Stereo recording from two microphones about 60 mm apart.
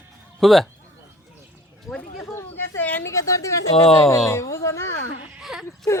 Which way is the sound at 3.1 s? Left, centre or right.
Left.